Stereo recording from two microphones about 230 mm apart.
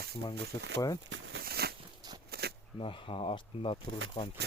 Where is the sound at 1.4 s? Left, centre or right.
Right.